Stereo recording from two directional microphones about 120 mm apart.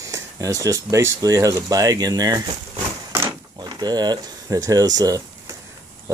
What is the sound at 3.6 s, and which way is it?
Speech, 35° right (ahead or behind).